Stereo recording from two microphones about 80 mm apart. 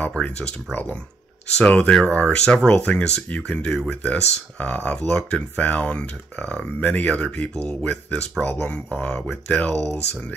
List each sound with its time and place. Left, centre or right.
0.2 s speech: centre